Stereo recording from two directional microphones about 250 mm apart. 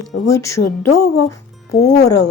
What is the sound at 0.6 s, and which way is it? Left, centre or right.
Speech, left.